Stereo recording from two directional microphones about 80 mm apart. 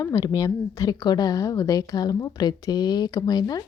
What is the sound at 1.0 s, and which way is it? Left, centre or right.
A woman's voice, left.